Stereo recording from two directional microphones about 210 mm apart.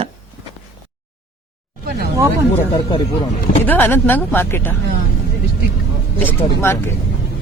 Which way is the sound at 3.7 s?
10° left (ahead or behind).